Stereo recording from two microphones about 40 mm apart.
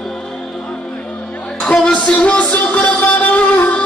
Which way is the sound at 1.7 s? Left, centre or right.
Left.